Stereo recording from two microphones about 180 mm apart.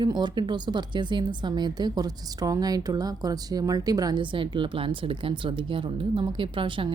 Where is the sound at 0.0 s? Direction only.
25° right (ahead or behind).